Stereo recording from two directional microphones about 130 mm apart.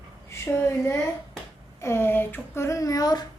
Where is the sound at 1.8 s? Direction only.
20° left (ahead or behind).